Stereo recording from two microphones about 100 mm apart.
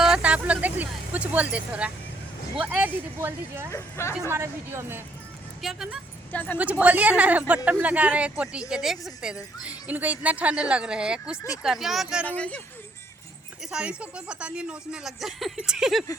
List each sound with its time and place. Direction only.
0.0 s vehicle: 10° right (ahead or behind)
2.6 s speech: 15° right (ahead or behind)
3.7 s a woman's voice: 30° left (ahead or behind)
4.3 s speech: 25° right (ahead or behind)
5.6 s speech: 5° right (ahead or behind)
6.3 s a woman's voice: 20° left (ahead or behind)
6.6 s speech: 15° right (ahead or behind)
12.2 s speech: 15° left (ahead or behind)
13.6 s speech: 5° right (ahead or behind)